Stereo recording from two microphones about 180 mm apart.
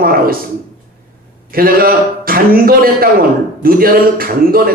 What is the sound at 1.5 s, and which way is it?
Speech, 55° right (ahead or behind).